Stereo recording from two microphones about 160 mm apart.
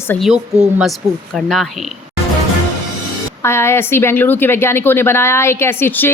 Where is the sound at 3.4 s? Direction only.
15° left (ahead or behind).